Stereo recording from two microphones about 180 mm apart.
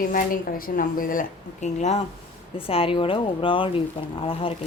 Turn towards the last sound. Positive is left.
turn(degrees=30)  # may be behind; listen again after turning